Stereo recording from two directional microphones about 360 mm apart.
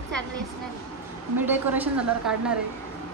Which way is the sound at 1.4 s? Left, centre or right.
Centre.